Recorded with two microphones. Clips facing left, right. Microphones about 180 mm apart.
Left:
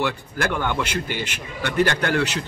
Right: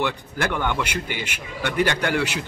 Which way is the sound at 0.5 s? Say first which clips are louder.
Even; 15° left (ahead or behind).